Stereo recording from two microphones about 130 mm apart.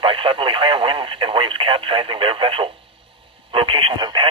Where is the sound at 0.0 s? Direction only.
40° right (ahead or behind).